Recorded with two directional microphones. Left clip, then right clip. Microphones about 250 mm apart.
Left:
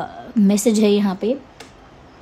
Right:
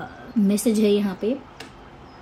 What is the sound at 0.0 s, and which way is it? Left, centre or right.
A woman's voice, left.